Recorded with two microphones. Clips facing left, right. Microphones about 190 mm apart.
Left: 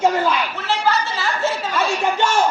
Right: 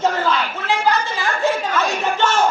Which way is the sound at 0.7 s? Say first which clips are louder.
Right 1 dB; 15° right (ahead or behind).